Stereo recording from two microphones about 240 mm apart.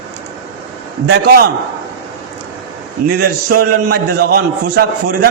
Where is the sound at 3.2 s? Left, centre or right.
Right.